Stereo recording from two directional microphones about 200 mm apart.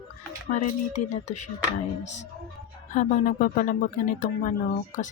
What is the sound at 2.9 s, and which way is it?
Speech, 40° left (ahead or behind).